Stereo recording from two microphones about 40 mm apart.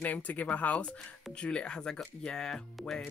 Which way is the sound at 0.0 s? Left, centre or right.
Left.